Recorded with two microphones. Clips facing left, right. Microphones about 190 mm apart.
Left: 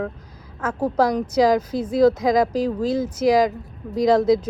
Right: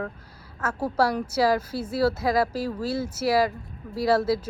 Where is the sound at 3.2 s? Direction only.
15° left (ahead or behind).